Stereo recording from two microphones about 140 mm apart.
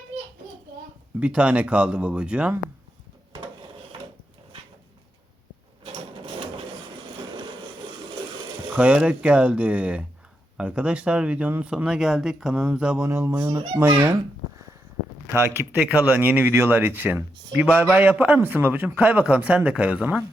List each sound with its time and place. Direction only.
1.2 s speech: 10° right (ahead or behind)
5.8 s sewing machine: 40° right (ahead or behind)
8.7 s speech: 10° right (ahead or behind)
13.0 s speech: 20° right (ahead or behind)
15.3 s speech: 15° right (ahead or behind)